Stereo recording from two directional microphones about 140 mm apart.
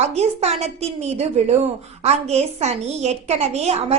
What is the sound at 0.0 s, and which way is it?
A woman's voice, 50° right (ahead or behind).